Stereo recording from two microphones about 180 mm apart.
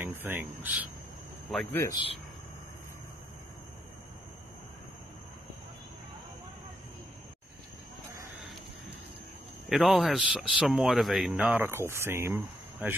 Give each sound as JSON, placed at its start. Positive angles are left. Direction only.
{"t": 0.0, "sound": "speech", "side_deg": -10}
{"t": 1.5, "sound": "speech", "side_deg": 5}
{"t": 1.8, "sound": "speech", "side_deg": 20}
{"t": 9.7, "sound": "speech", "side_deg": 0}